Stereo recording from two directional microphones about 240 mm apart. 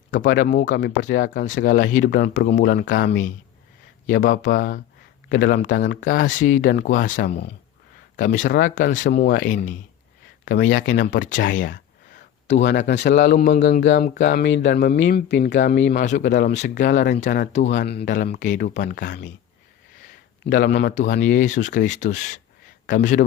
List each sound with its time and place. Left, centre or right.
0.1 s speech: left
12.5 s a man's voice: left
15.8 s speech: left
18.7 s a man's voice: left
20.4 s speech: left